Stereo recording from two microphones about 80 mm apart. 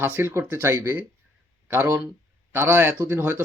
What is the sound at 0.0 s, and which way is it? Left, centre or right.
Speech, right.